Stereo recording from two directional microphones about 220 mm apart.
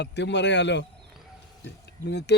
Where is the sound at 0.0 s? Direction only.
50° left (ahead or behind).